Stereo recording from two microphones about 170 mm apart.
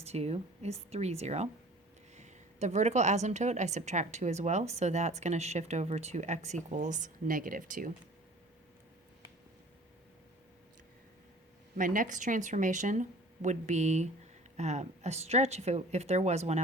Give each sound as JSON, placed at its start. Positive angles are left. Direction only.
{"t": 0.0, "sound": "a woman's voice", "side_deg": -40}
{"t": 11.8, "sound": "a woman's voice", "side_deg": -50}